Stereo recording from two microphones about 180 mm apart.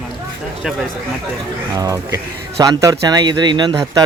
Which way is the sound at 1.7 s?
20° right (ahead or behind).